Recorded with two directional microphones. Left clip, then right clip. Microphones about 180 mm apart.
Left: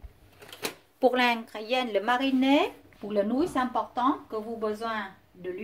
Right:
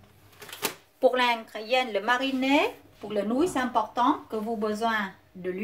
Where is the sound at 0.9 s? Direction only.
40° left (ahead or behind).